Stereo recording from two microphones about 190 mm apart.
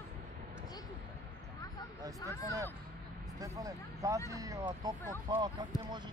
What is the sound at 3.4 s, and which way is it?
Speech, 15° right (ahead or behind).